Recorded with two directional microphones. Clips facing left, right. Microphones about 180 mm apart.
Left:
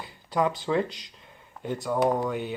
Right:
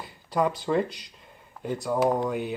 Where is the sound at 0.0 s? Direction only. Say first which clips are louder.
Even; centre (ahead or behind).